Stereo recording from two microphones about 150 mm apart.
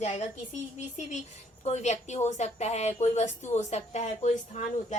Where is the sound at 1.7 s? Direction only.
50° left (ahead or behind).